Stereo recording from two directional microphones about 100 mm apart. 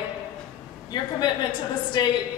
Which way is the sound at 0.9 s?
45° left (ahead or behind).